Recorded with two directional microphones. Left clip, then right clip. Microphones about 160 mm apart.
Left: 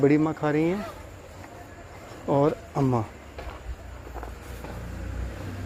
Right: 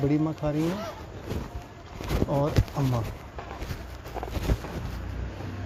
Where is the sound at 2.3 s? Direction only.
75° left (ahead or behind).